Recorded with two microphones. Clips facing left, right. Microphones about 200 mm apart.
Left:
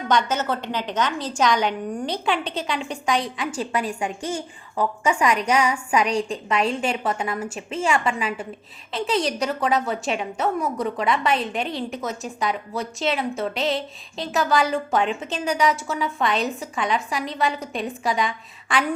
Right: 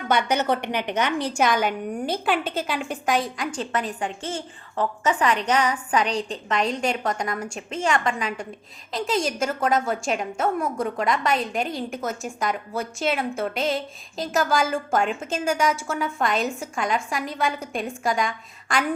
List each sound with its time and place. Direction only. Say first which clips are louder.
0.3 s a woman's voice: right 2 dB; 15° right (ahead or behind); by 18.9 s centre (ahead or behind)